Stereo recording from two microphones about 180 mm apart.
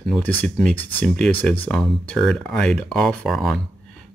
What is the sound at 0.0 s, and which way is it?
Speech, 5° left (ahead or behind).